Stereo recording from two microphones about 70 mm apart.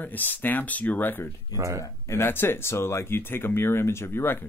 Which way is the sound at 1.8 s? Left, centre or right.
Left.